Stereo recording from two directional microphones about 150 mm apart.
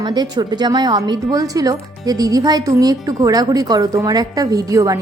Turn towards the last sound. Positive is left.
turn(degrees=-20)  # may be behind; listen again after turning